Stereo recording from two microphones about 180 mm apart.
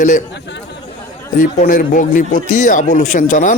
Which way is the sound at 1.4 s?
45° left (ahead or behind).